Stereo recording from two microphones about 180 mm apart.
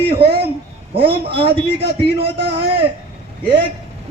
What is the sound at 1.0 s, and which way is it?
A man's voice, 30° right (ahead or behind).